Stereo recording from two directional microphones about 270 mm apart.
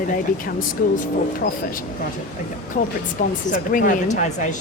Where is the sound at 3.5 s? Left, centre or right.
Left.